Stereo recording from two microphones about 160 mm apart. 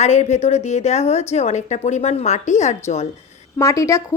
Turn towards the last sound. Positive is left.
turn(degrees=20)  # may be behind; listen again after turning